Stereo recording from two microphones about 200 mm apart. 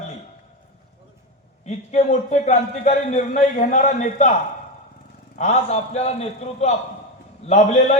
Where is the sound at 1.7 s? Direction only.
35° left (ahead or behind).